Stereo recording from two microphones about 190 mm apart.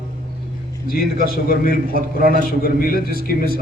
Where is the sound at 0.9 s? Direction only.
50° left (ahead or behind).